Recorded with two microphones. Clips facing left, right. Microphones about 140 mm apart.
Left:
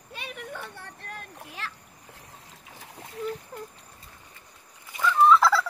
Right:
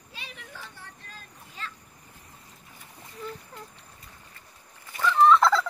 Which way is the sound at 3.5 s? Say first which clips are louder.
Left 5 dB; 35° left (ahead or behind).